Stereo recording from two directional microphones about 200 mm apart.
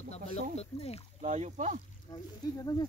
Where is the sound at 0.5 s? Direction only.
30° left (ahead or behind).